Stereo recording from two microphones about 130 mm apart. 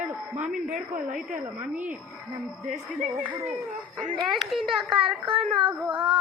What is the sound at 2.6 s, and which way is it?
Speech, 70° right (ahead or behind).